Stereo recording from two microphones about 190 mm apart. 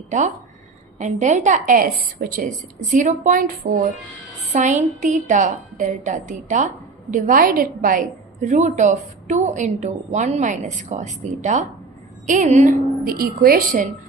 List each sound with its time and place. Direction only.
0.9 s a woman's voice: 40° right (ahead or behind)